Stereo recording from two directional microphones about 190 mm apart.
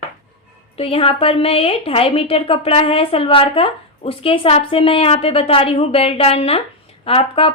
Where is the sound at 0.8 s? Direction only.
30° left (ahead or behind).